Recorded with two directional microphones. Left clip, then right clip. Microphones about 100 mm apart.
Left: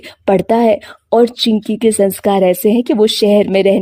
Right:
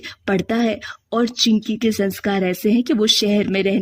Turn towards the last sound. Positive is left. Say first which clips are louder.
# left 9 dB
turn(degrees=35)  # may be behind; listen again after turning